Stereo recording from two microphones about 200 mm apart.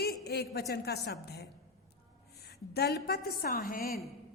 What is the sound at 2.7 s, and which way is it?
A woman's voice, 55° left (ahead or behind).